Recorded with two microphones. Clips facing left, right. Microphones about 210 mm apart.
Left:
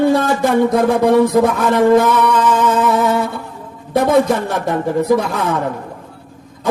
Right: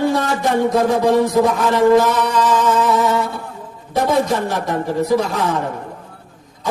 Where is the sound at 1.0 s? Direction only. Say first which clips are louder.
Left 3 dB; 55° left (ahead or behind).